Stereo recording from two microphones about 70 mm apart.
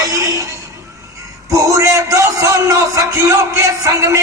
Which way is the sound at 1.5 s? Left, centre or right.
Right.